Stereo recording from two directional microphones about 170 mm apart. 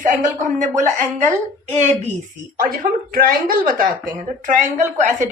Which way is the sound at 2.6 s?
55° right (ahead or behind).